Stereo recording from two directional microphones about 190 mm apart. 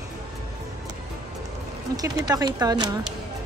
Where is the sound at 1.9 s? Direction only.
20° right (ahead or behind).